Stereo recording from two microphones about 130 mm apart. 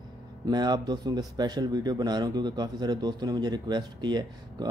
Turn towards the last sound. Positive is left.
turn(degrees=-35)  # may be behind; listen again after turning